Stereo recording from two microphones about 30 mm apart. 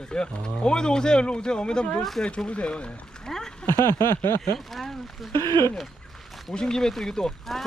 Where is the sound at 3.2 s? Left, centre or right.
Centre.